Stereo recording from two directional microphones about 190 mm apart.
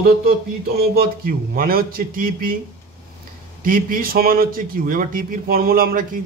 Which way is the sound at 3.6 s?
50° right (ahead or behind).